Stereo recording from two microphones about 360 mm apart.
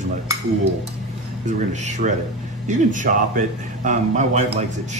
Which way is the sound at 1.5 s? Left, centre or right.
Centre.